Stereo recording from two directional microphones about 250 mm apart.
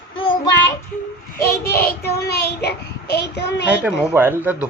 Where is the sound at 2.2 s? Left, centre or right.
Left.